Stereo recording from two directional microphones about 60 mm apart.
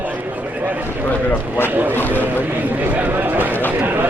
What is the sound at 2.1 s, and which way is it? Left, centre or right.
Run, right.